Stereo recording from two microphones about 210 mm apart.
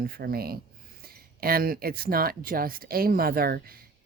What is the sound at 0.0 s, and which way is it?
Speech, 45° right (ahead or behind).